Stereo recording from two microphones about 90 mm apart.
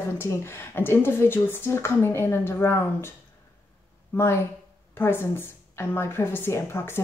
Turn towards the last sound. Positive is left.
turn(degrees=25)  # may be behind; listen again after turning